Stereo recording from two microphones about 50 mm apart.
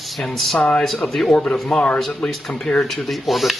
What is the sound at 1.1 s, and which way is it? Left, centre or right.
Speech, centre.